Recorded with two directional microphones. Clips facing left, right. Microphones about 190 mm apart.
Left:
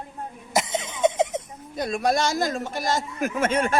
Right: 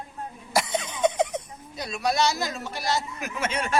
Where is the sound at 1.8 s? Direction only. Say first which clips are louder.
Left 3 dB; 50° left (ahead or behind).